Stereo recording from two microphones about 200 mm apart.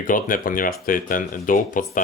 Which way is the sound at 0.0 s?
45° left (ahead or behind).